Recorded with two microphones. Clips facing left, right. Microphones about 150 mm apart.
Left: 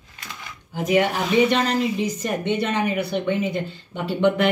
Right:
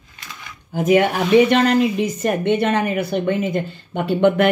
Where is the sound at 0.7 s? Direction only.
50° right (ahead or behind).